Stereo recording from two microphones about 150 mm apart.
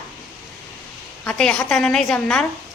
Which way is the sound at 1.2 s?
5° left (ahead or behind).